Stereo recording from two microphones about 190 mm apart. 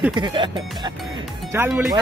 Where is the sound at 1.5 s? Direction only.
15° right (ahead or behind).